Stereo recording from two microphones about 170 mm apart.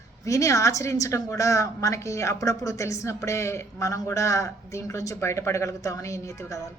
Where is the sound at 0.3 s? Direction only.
20° left (ahead or behind).